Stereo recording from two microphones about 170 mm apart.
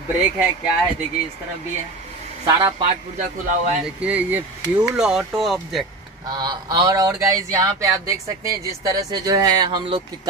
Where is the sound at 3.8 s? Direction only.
10° right (ahead or behind).